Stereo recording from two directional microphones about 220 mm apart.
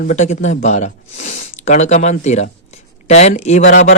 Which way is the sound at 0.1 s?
35° left (ahead or behind).